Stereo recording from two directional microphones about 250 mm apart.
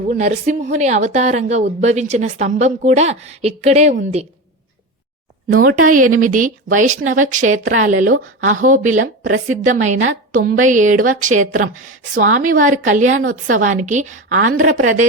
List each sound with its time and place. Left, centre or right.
0.1 s a woman's voice: right
5.6 s a woman's voice: right